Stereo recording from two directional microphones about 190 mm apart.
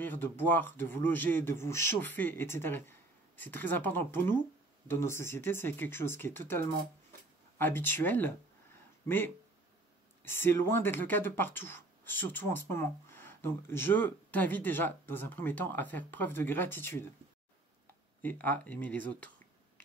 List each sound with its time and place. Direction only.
0.0 s speech: 10° left (ahead or behind)
18.2 s speech: 10° left (ahead or behind)